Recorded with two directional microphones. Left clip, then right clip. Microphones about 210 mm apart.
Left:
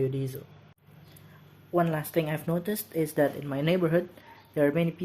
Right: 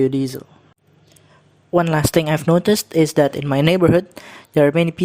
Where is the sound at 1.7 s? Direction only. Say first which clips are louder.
Right 10 dB; 45° right (ahead or behind).